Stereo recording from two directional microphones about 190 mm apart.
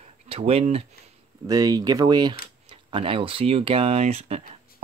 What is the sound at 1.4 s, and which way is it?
Speech, 20° right (ahead or behind).